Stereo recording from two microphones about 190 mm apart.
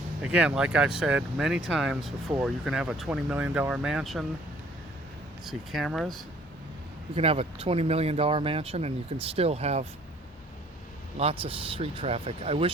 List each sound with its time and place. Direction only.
0.2 s speech: 5° right (ahead or behind)
5.5 s speech: centre (ahead or behind)
7.2 s speech: 30° right (ahead or behind)
11.2 s speech: 30° right (ahead or behind)